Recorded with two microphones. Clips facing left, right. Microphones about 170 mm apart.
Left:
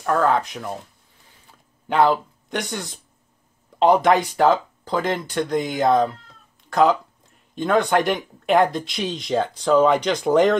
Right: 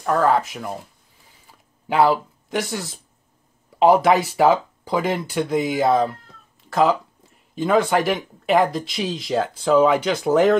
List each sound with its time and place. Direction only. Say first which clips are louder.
0.0 s speech: right 1 dB; 5° right (ahead or behind)
1.5 s a sound: even; 5° right (ahead or behind)
3.8 s speech: right 1 dB; 5° right (ahead or behind)